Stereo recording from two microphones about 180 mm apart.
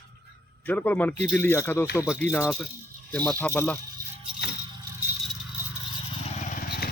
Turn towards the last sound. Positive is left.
turn(degrees=50)  # may be behind; listen again after turning